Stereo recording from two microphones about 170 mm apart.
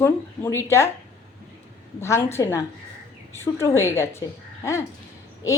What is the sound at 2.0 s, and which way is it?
A woman's voice, 15° left (ahead or behind).